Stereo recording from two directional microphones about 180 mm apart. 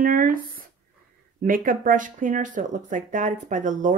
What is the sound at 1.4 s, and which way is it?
Speech, 50° right (ahead or behind).